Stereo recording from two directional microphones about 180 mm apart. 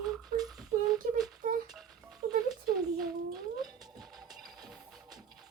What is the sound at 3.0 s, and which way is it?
Cat, centre (ahead or behind).